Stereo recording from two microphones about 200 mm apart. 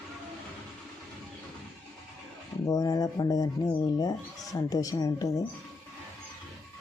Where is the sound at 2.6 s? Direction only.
20° left (ahead or behind).